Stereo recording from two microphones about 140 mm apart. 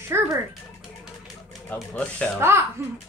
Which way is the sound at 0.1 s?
15° right (ahead or behind).